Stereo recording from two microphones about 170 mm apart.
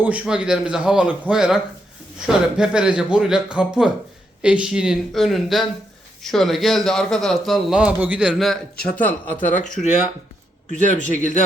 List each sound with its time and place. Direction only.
0.0 s a man's voice: 10° right (ahead or behind)
9.0 s speech: 10° left (ahead or behind)
10.7 s a man's voice: 45° right (ahead or behind)
11.1 s speech: 45° left (ahead or behind)